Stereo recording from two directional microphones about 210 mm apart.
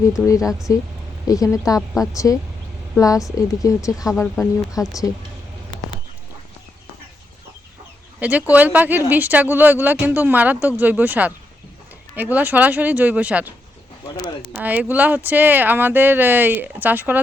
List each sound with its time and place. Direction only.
0.0 s a woman's voice: 15° left (ahead or behind)
8.2 s speech: 5° right (ahead or behind)
14.6 s speech: 10° right (ahead or behind)